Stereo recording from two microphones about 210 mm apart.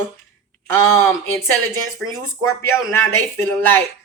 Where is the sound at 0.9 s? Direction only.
10° left (ahead or behind).